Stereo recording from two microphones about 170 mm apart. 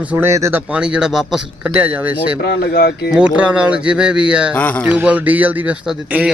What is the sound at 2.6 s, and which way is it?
Speech, 65° left (ahead or behind).